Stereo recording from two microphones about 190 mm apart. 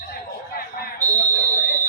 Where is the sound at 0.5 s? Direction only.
55° left (ahead or behind).